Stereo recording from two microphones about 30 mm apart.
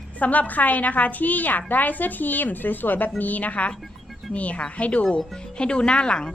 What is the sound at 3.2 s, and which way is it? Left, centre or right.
Speech, left.